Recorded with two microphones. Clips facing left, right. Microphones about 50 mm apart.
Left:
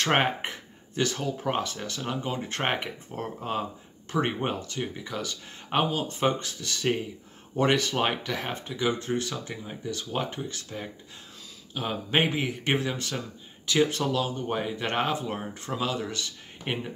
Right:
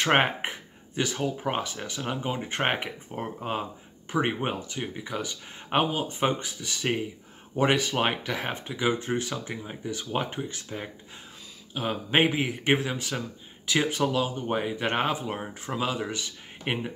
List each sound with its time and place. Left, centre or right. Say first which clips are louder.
0.0 s speech: right 1 dB; centre